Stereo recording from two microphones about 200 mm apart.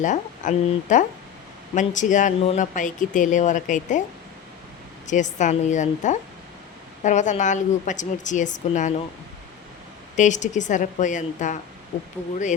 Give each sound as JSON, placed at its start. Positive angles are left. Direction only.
{"t": 0.0, "sound": "speech", "side_deg": 40}
{"t": 5.0, "sound": "speech", "side_deg": 35}
{"t": 10.2, "sound": "speech", "side_deg": 35}